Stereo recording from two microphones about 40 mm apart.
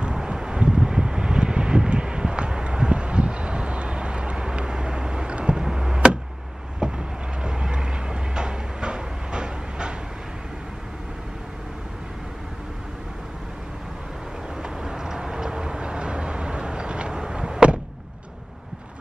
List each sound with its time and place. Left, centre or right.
0.0 s wind noise: right
6.8 s vehicle: right
14.6 s vehicle: centre